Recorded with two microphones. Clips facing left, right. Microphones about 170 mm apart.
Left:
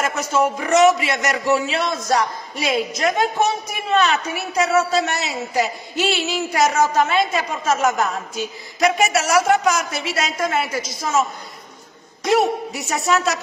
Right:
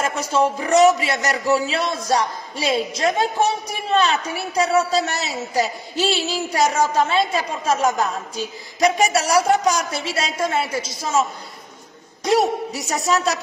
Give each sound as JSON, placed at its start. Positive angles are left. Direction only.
{"t": 0.0, "sound": "a man's voice", "side_deg": -30}
{"t": 12.4, "sound": "a man's voice", "side_deg": -35}